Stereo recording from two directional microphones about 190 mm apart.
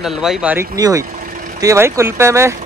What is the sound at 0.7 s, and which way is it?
Speech, 15° right (ahead or behind).